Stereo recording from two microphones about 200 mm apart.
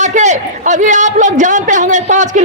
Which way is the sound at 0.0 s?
35° right (ahead or behind).